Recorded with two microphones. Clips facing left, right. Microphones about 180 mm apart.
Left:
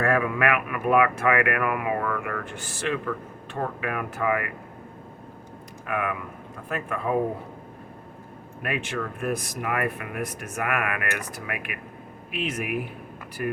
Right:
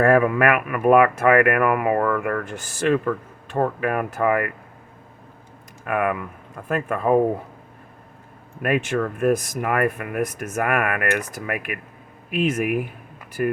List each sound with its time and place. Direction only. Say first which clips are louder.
0.0 s speech: right 7 dB; 50° right (ahead or behind)
5.8 s speech: right 6 dB; 55° right (ahead or behind)
8.6 s speech: right 8 dB; 50° right (ahead or behind)